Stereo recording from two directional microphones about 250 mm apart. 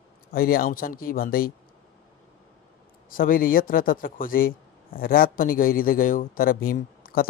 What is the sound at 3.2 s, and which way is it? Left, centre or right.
Speech, left.